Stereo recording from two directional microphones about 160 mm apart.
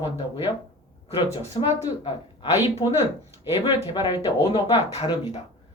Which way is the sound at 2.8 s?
25° left (ahead or behind).